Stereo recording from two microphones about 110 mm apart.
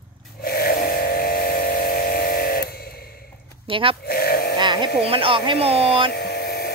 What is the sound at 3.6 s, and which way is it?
Speech, 55° right (ahead or behind).